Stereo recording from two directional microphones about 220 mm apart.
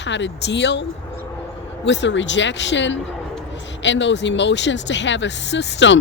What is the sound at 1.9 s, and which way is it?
A woman's voice, 55° left (ahead or behind).